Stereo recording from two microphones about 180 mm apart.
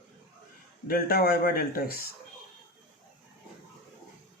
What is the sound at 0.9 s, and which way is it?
Speech, 55° left (ahead or behind).